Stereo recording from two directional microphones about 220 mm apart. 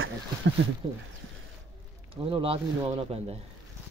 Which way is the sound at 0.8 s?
20° right (ahead or behind).